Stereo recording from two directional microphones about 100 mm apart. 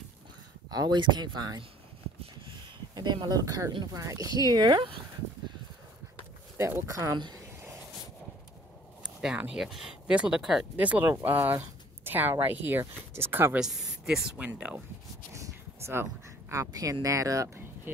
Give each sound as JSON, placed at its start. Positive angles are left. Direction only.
{"t": 0.7, "sound": "speech", "side_deg": -45}
{"t": 2.9, "sound": "speech", "side_deg": -50}
{"t": 6.6, "sound": "speech", "side_deg": -30}
{"t": 9.0, "sound": "a sound", "side_deg": -10}
{"t": 9.6, "sound": "speech", "side_deg": -5}
{"t": 10.8, "sound": "speech", "side_deg": -15}
{"t": 13.6, "sound": "speech", "side_deg": -5}
{"t": 15.3, "sound": "speech", "side_deg": -30}